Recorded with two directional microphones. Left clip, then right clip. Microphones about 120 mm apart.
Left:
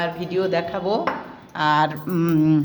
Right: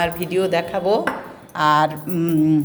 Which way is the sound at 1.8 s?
35° left (ahead or behind).